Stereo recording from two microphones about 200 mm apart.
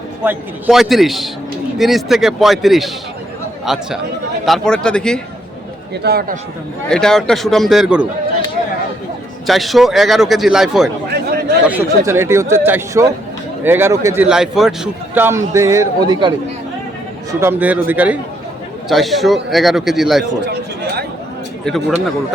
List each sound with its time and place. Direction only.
0.3 s a man's voice: centre (ahead or behind)
5.9 s speech: 55° right (ahead or behind)
6.9 s a man's voice: 5° left (ahead or behind)
9.5 s a man's voice: centre (ahead or behind); by 16.3 s 20° right (ahead or behind)
17.4 s a man's voice: 10° right (ahead or behind)
21.6 s a man's voice: 5° left (ahead or behind)